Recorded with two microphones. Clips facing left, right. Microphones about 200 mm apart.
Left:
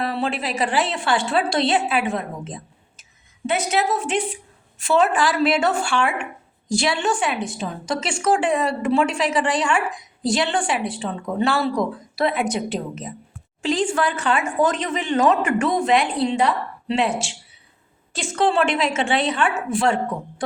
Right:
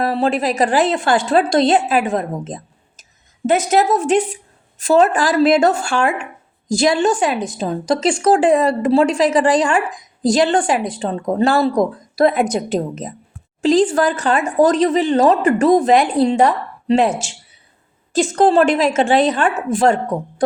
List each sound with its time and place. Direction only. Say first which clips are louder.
0.0 s a woman's voice: right 7 dB; 40° right (ahead or behind)